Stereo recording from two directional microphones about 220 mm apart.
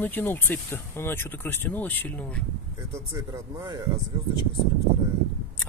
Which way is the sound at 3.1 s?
15° right (ahead or behind).